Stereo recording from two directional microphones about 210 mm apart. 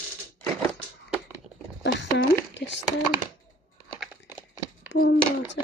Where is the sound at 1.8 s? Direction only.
55° left (ahead or behind).